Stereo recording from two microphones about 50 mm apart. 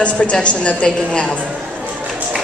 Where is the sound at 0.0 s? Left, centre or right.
Left.